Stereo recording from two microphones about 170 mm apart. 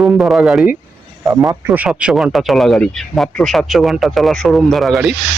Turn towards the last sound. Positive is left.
turn(degrees=0)  # may be behind; listen again after turning